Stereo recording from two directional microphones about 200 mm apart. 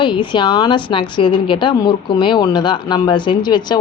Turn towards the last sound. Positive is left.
turn(degrees=20)  # may be behind; listen again after turning